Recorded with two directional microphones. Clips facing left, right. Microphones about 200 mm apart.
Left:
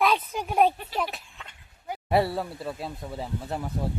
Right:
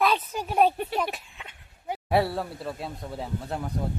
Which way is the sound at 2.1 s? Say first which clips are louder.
Left 1 dB; centre (ahead or behind).